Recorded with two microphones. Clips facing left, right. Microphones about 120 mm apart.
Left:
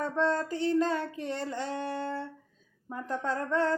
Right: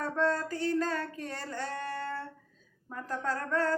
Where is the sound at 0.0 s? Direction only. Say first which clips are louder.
Left 1 dB; 20° left (ahead or behind).